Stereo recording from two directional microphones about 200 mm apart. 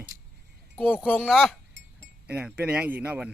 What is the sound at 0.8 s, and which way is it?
Speech, 5° left (ahead or behind).